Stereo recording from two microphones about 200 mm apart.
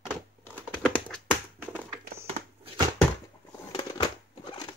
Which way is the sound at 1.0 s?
5° left (ahead or behind).